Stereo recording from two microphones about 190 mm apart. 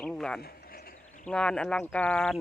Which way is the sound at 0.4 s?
50° left (ahead or behind).